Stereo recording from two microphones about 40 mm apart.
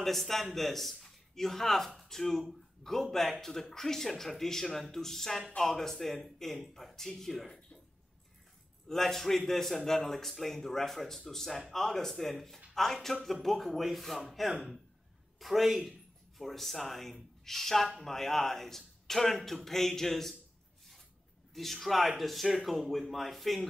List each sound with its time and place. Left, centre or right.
0.0 s a man's voice: centre
8.8 s a man's voice: centre
15.3 s a man's voice: centre
21.5 s speech: centre